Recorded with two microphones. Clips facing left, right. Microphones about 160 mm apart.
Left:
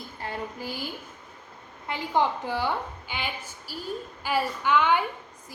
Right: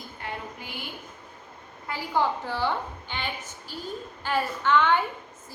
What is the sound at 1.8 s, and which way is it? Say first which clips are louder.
A woman's voice: left 1 dB; 20° left (ahead or behind).